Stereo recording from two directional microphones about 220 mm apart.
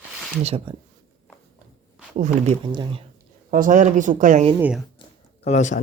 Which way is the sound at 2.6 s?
20° right (ahead or behind).